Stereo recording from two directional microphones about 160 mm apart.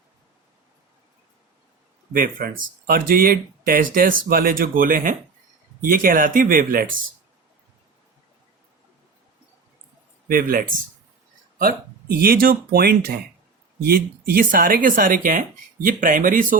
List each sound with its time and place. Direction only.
2.1 s speech: 60° right (ahead or behind)
10.2 s speech: 60° right (ahead or behind)
11.6 s speech: 70° right (ahead or behind)